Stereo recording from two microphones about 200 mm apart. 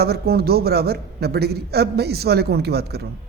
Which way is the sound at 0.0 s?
50° right (ahead or behind).